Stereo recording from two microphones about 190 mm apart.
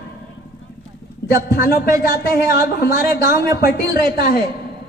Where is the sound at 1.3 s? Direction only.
55° left (ahead or behind).